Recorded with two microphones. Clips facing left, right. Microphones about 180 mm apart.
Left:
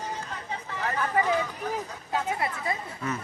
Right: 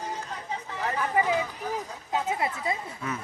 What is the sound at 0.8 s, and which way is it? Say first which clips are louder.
Speech: even; 15° right (ahead or behind).